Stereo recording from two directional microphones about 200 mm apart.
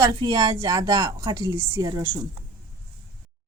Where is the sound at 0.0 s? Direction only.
20° right (ahead or behind).